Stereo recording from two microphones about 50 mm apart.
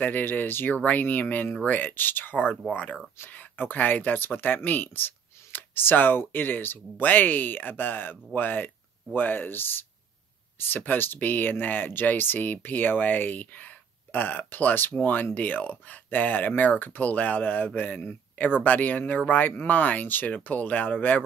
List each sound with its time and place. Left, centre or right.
0.0 s speech: left